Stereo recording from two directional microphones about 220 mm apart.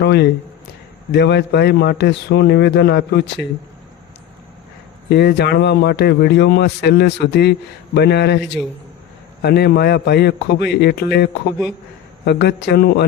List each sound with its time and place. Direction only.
0.0 s a man's voice: 50° left (ahead or behind)
5.0 s a man's voice: 50° left (ahead or behind)